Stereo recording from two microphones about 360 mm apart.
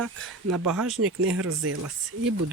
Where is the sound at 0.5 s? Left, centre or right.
Right.